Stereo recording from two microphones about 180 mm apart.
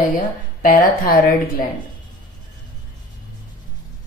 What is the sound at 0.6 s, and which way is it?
Speech, 50° left (ahead or behind).